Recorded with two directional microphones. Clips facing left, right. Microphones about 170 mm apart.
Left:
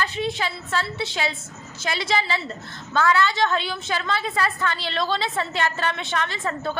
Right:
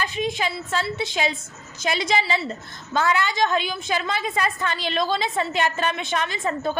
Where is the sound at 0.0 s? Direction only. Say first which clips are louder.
Right 1 dB; 15° right (ahead or behind).